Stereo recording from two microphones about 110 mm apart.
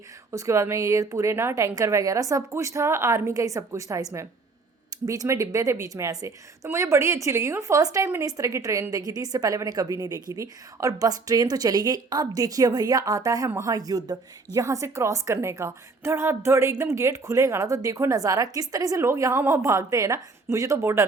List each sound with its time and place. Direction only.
0.3 s a woman's voice: 30° right (ahead or behind)